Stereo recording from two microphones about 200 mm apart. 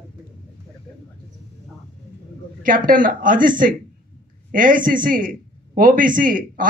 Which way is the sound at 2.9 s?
45° right (ahead or behind).